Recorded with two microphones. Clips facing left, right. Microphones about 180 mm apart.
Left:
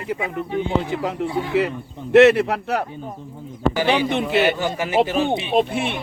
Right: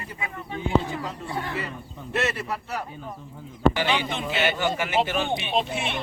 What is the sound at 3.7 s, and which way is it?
A man's voice, 40° left (ahead or behind).